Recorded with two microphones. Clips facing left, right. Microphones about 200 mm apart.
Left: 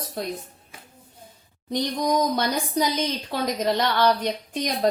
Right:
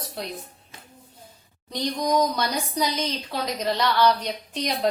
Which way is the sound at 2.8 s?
55° left (ahead or behind).